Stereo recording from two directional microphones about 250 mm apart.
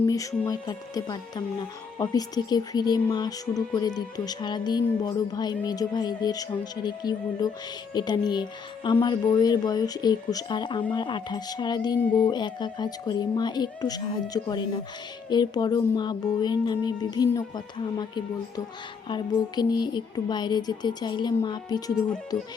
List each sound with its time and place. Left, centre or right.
0.0 s speech: centre